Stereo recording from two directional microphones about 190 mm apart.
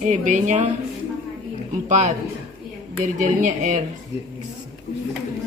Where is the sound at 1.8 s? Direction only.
40° right (ahead or behind).